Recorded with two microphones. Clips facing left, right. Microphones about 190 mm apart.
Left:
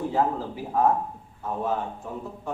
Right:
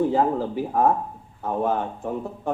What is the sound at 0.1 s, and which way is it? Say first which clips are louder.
Speech: right 4 dB; 55° right (ahead or behind).